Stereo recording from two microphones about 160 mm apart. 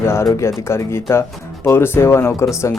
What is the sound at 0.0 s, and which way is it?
Speech, 15° left (ahead or behind).